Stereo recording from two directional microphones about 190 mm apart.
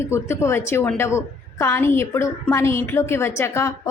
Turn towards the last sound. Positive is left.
turn(degrees=15)  # may be behind; listen again after turning